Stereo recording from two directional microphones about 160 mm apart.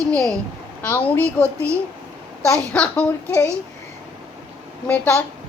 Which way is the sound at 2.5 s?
5° left (ahead or behind).